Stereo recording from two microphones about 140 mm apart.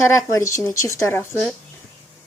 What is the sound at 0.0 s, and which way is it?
Speech, 20° left (ahead or behind).